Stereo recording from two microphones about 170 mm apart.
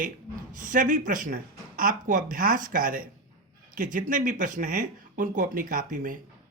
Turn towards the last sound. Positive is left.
turn(degrees=-50)  # may be behind; listen again after turning